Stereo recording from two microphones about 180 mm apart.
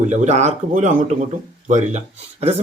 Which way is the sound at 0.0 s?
40° right (ahead or behind).